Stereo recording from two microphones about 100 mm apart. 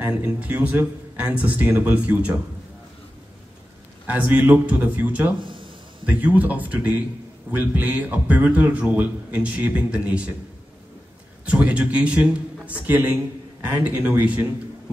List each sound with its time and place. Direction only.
0.0 s a man's voice: 10° right (ahead or behind)
4.0 s a man's voice: 15° right (ahead or behind)
5.4 s a sound: 60° right (ahead or behind)
6.0 s a man's voice: 15° right (ahead or behind)
11.4 s a man's voice: 15° right (ahead or behind)